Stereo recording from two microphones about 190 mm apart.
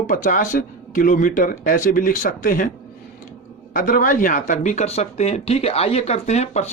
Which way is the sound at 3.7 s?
45° left (ahead or behind).